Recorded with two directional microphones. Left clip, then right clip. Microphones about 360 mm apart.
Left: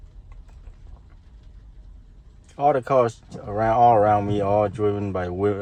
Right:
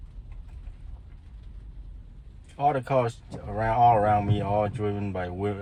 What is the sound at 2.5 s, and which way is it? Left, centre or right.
Speech, left.